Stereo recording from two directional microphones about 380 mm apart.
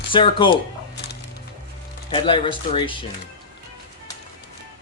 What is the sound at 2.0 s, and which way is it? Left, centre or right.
Speech, centre.